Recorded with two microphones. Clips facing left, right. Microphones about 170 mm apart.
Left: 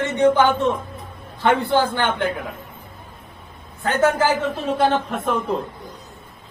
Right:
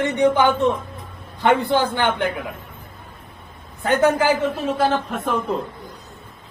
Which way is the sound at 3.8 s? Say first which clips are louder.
Right 1 dB; 15° right (ahead or behind).